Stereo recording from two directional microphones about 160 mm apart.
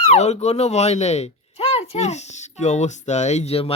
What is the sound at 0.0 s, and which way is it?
Speech, 45° left (ahead or behind).